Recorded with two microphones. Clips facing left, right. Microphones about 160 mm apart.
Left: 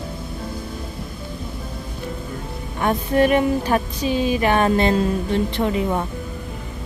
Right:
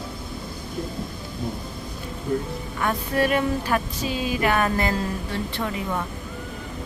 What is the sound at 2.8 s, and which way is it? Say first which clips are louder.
Speech: left 6 dB; 20° left (ahead or behind).